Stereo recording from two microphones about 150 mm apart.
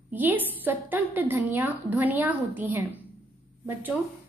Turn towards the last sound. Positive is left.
turn(degrees=-15)  # may be behind; listen again after turning